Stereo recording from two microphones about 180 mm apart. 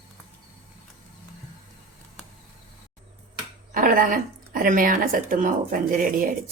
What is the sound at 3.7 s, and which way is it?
A woman's voice, 50° right (ahead or behind).